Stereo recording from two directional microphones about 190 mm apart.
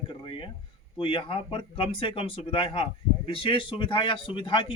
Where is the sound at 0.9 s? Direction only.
25° left (ahead or behind).